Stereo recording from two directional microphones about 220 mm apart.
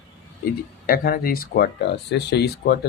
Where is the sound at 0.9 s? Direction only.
45° left (ahead or behind).